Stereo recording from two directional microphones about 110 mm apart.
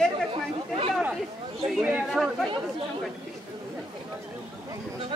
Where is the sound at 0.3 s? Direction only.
55° right (ahead or behind).